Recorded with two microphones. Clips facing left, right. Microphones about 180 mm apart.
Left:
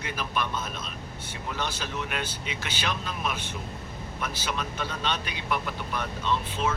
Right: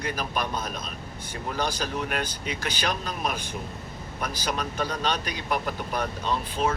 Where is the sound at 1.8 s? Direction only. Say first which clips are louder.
Right 4 dB; 45° right (ahead or behind).